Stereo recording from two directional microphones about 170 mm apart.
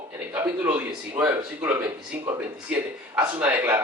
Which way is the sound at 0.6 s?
10° right (ahead or behind).